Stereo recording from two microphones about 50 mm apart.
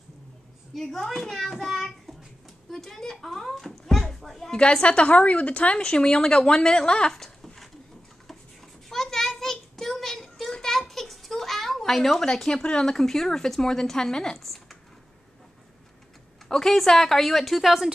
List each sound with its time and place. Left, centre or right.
0.7 s a child's voice: centre
4.5 s speech: left
8.8 s a sound: centre
12.6 s speech: centre
14.4 s a sound: centre
16.4 s a child's voice: centre